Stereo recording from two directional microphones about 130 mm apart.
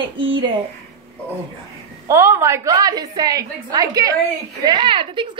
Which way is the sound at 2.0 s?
20° right (ahead or behind).